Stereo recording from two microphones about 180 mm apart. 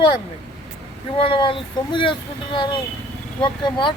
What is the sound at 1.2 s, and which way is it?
Speech, 30° left (ahead or behind).